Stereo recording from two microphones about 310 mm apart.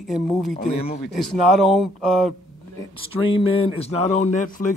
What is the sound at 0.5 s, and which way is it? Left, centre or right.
Speech, centre.